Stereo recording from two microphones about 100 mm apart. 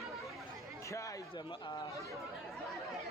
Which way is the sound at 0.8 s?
30° left (ahead or behind).